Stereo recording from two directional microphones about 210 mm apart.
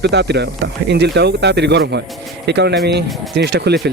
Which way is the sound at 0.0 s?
55° right (ahead or behind).